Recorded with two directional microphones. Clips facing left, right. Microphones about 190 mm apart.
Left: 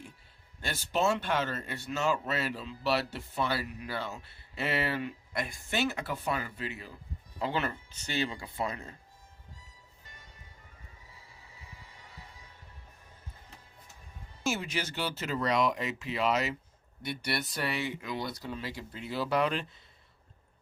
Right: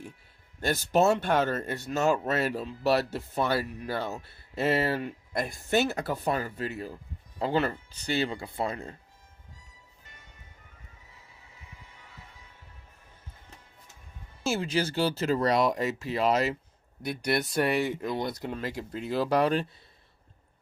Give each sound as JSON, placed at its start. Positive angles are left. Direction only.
{"t": 0.6, "sound": "speech", "side_deg": -45}
{"t": 14.5, "sound": "speech", "side_deg": -30}
{"t": 17.3, "sound": "speech", "side_deg": -50}